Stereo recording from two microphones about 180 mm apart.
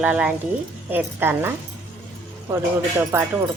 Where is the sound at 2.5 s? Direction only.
15° right (ahead or behind).